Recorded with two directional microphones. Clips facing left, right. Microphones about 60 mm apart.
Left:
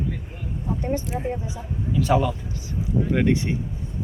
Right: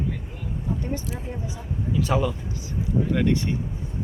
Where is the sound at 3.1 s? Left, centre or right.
Centre.